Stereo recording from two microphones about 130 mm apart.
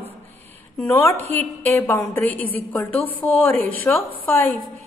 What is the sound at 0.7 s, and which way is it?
A woman's voice, 15° left (ahead or behind).